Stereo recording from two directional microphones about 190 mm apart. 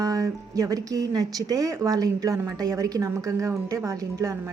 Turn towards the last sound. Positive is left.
turn(degrees=-15)  # may be behind; listen again after turning